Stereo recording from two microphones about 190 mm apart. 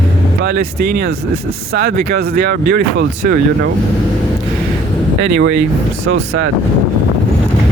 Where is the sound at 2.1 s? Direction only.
55° right (ahead or behind).